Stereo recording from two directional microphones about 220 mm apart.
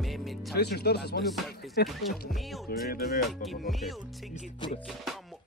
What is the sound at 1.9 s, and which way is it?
Music, centre (ahead or behind).